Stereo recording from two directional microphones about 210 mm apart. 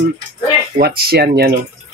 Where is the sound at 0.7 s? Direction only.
50° right (ahead or behind).